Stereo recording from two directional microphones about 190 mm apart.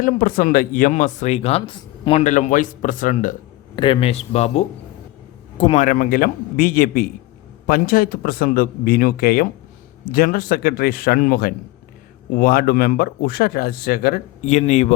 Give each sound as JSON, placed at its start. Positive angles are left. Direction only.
{"t": 0.0, "sound": "speech", "side_deg": 50}
{"t": 2.2, "sound": "speech", "side_deg": 40}
{"t": 3.8, "sound": "speech", "side_deg": 30}
{"t": 14.4, "sound": "speech", "side_deg": 40}